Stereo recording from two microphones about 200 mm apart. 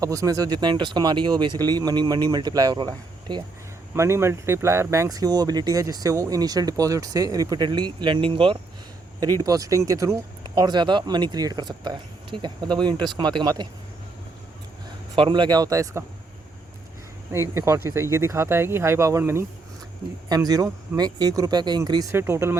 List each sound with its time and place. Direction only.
0.0 s speech: 15° right (ahead or behind)
15.1 s speech: 25° right (ahead or behind)
17.3 s speech: 15° right (ahead or behind)